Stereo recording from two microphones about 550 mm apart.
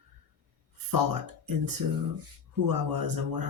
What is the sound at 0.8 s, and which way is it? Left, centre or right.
Speech, right.